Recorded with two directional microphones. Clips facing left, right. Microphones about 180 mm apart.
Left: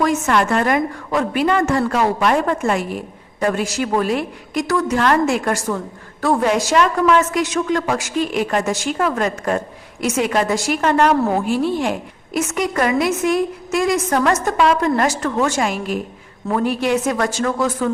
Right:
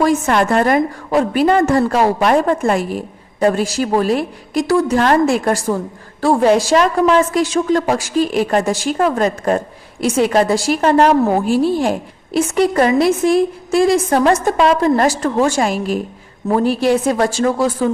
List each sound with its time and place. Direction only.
0.0 s a woman's voice: 35° right (ahead or behind)